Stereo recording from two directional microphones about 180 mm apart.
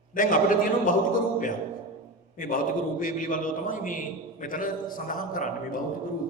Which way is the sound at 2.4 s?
50° left (ahead or behind).